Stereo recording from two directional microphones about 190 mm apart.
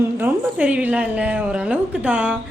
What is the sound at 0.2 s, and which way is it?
A woman's voice, 5° right (ahead or behind).